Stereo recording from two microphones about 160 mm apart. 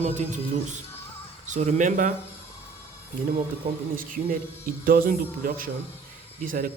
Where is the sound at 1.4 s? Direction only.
50° right (ahead or behind).